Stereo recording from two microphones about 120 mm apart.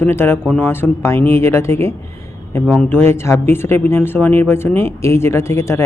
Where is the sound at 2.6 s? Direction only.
10° left (ahead or behind).